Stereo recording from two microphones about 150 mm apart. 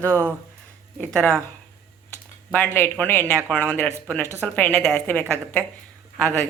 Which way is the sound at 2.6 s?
15° left (ahead or behind).